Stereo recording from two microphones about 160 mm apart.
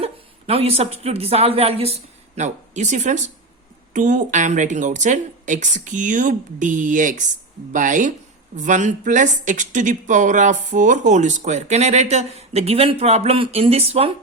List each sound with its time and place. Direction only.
0.0 s a woman's voice: 40° right (ahead or behind)